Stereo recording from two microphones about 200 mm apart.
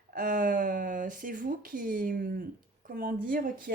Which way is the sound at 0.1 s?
45° right (ahead or behind).